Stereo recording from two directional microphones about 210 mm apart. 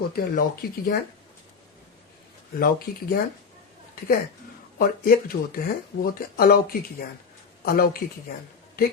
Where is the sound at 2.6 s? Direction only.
45° left (ahead or behind).